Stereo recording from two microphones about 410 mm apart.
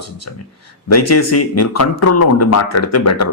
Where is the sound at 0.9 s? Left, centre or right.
Left.